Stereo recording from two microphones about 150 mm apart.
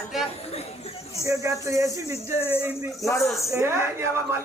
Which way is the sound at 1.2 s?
20° right (ahead or behind).